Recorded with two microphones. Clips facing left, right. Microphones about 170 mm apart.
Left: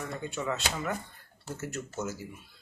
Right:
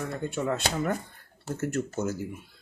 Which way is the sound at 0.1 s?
55° right (ahead or behind).